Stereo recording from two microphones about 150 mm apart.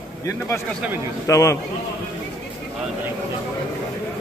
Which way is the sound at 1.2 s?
20° left (ahead or behind).